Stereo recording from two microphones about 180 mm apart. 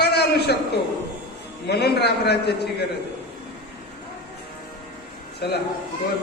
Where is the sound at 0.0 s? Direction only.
65° left (ahead or behind).